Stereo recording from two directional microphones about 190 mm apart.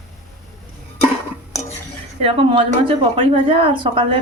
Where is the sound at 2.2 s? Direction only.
30° right (ahead or behind).